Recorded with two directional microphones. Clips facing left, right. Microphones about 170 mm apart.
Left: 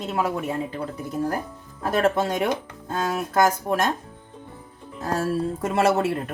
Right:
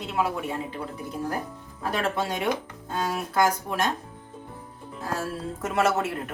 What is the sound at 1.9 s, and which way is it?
Speech, 45° left (ahead or behind).